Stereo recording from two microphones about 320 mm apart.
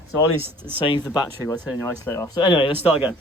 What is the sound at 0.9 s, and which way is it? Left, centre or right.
Speech, centre.